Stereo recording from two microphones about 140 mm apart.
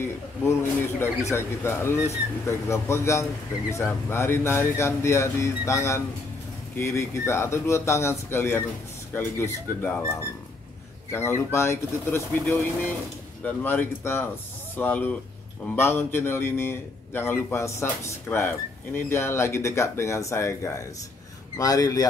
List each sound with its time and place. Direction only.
0.0 s speech: 20° left (ahead or behind)
11.1 s speech: 20° left (ahead or behind)